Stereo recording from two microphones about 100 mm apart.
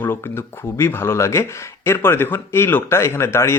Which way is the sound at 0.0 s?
25° left (ahead or behind).